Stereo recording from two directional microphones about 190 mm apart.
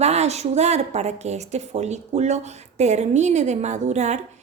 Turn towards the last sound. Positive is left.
turn(degrees=-35)  # may be behind; listen again after turning